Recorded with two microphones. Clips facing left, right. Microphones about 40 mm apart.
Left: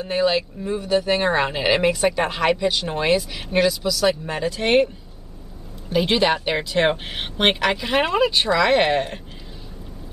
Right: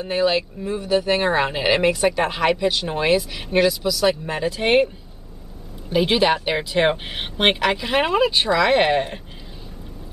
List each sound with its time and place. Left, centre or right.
0.0 s speech: centre
5.9 s speech: centre